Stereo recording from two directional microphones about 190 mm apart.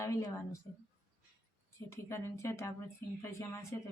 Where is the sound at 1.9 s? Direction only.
15° left (ahead or behind).